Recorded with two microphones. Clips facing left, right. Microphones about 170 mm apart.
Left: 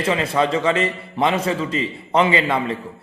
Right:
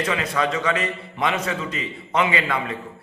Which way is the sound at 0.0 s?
30° left (ahead or behind).